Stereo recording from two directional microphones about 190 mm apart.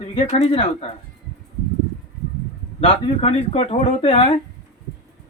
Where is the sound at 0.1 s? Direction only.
35° left (ahead or behind).